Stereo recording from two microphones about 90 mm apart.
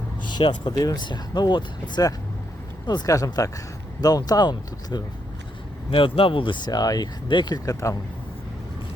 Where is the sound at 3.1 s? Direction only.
40° left (ahead or behind).